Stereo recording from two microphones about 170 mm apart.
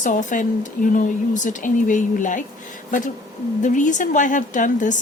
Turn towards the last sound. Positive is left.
turn(degrees=50)  # may be behind; listen again after turning